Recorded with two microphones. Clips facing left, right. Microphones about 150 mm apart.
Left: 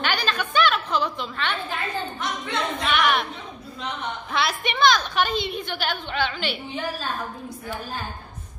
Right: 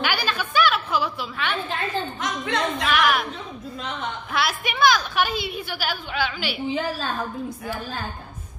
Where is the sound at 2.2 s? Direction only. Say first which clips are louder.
Right 2 dB; 90° right.